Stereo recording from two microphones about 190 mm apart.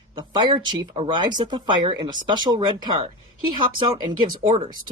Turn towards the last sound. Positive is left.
turn(degrees=-25)  # may be behind; listen again after turning